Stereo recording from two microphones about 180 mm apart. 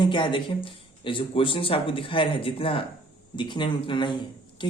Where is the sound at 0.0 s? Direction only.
25° left (ahead or behind).